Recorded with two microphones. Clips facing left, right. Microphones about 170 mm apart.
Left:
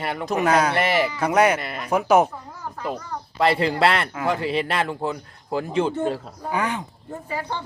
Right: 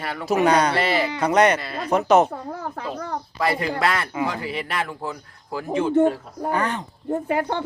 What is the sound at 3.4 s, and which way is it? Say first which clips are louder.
Speech: left 4 dB; 30° left (ahead or behind).